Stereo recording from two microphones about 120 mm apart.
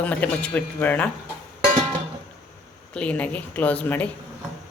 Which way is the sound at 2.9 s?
10° left (ahead or behind).